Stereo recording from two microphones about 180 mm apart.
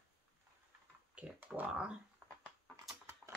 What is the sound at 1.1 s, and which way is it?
Speech, 5° right (ahead or behind).